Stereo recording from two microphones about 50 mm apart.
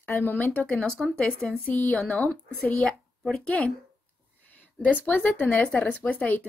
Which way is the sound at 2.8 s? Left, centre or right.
Centre.